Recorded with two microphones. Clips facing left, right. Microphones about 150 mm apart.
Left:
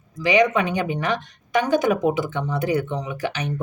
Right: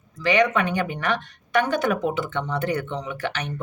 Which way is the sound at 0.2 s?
15° left (ahead or behind).